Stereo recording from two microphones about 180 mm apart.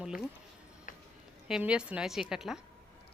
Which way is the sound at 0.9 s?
45° left (ahead or behind).